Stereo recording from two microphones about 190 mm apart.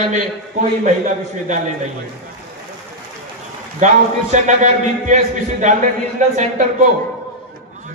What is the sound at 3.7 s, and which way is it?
A man's voice, 40° right (ahead or behind).